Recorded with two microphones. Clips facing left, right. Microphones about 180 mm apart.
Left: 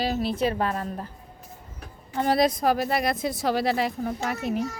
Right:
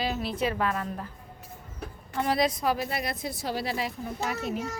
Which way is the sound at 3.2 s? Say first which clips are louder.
Left 7 dB; 90° left.